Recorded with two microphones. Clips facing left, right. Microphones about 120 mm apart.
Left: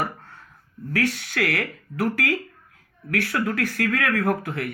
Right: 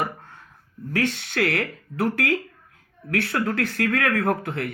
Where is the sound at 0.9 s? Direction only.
25° right (ahead or behind).